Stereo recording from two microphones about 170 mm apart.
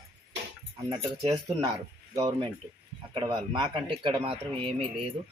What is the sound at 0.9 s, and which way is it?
Speech, 30° right (ahead or behind).